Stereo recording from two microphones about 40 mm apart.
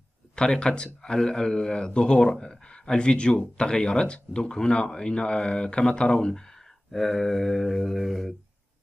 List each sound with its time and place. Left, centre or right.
0.4 s speech: left; by 8.4 s centre